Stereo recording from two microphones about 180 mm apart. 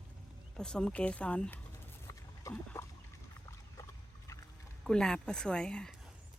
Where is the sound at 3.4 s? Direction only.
15° left (ahead or behind).